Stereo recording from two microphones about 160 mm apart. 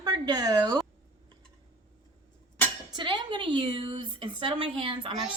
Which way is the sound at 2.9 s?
30° right (ahead or behind).